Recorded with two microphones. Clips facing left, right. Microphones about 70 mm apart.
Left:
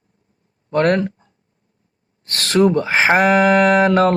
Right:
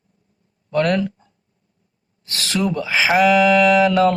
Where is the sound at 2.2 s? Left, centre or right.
Left.